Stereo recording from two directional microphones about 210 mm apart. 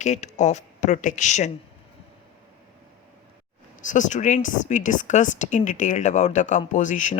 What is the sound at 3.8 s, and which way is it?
Speech, 35° left (ahead or behind).